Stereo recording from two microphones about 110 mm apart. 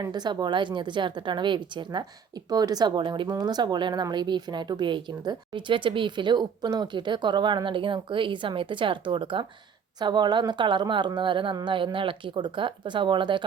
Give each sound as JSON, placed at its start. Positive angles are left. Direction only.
{"t": 0.0, "sound": "speech", "side_deg": -40}